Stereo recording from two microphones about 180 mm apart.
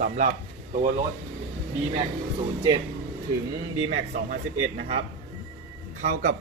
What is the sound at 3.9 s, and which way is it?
Speech, 50° right (ahead or behind).